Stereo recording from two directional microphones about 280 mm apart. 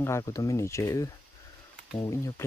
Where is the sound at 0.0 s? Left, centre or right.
Centre.